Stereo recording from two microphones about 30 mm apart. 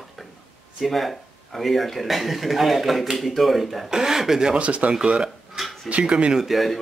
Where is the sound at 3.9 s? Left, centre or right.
Centre.